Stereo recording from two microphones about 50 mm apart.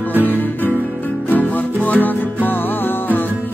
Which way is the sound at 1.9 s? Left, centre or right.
Left.